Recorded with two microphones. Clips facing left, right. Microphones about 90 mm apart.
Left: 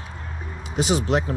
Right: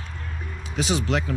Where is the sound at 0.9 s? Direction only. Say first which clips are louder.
Left 3 dB; 35° left (ahead or behind).